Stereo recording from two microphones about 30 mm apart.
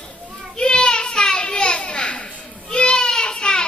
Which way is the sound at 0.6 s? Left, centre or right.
Left.